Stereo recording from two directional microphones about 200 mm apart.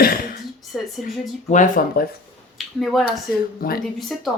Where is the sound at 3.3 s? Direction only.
50° left (ahead or behind).